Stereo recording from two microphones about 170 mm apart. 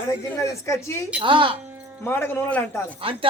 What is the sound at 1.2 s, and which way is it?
Speech, 30° right (ahead or behind).